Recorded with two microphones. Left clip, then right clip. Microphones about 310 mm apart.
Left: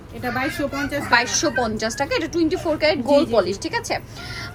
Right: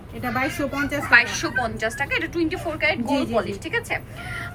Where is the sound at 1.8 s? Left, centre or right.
Left.